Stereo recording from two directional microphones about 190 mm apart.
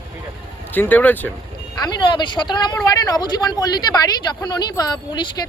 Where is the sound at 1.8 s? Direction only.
25° left (ahead or behind).